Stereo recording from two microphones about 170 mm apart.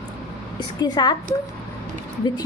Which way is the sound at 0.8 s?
25° left (ahead or behind).